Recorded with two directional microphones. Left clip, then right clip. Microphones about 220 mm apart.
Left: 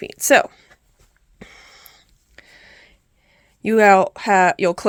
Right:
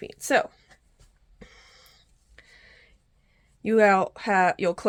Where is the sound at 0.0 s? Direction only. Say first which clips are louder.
Left 9 dB; 40° left (ahead or behind).